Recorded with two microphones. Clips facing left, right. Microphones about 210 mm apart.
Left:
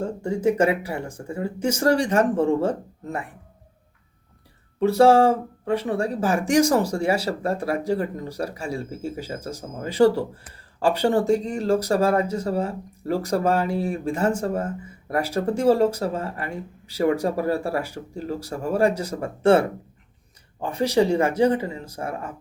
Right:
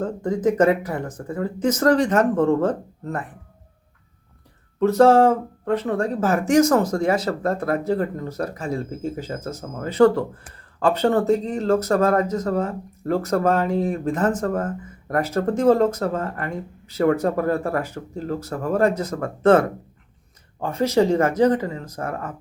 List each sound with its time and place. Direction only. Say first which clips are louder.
0.0 s speech: right 1 dB; 10° left (ahead or behind)
4.8 s speech: right 1 dB; 10° left (ahead or behind)
21.8 s speech: right 2 dB; 30° left (ahead or behind)